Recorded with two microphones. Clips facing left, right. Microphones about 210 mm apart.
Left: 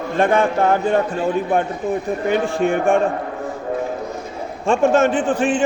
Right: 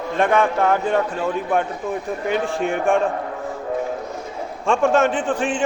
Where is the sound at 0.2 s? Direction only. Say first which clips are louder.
Left 2 dB; 30° left (ahead or behind).